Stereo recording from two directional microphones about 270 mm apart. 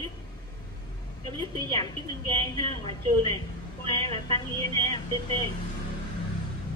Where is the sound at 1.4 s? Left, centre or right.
Centre.